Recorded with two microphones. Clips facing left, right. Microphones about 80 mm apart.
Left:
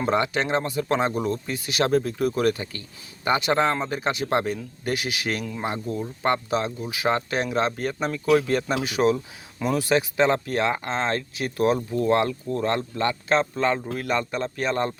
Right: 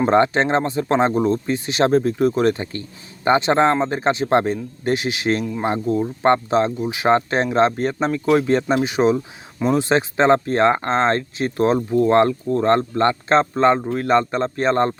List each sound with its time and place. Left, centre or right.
0.0 s speech: right